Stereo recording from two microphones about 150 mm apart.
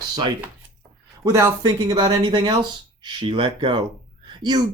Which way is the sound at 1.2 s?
20° right (ahead or behind).